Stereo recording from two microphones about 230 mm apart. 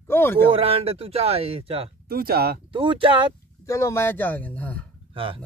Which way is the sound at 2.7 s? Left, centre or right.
Right.